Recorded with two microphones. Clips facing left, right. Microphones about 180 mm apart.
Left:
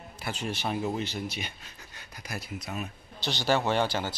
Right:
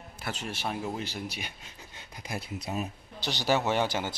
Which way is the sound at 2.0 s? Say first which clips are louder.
Right 2 dB; 25° right (ahead or behind).